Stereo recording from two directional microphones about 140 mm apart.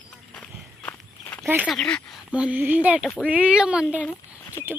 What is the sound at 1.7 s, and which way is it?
Speech, 5° left (ahead or behind).